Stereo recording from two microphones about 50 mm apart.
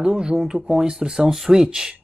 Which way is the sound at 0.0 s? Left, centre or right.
Centre.